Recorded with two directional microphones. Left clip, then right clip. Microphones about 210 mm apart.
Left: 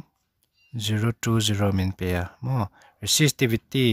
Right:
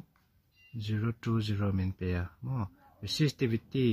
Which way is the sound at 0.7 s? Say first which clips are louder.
Left 10 dB; 45° left (ahead or behind).